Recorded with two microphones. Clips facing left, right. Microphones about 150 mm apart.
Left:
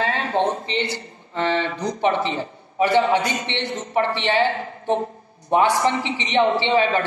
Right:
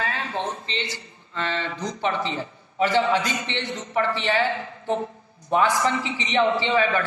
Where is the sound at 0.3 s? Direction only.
65° left (ahead or behind).